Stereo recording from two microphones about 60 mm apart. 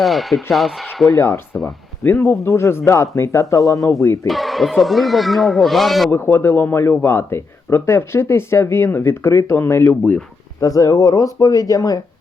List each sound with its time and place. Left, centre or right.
0.0 s speech: centre
1.1 s speech: left
4.3 s speech: centre
6.1 s speech: left
10.6 s speech: left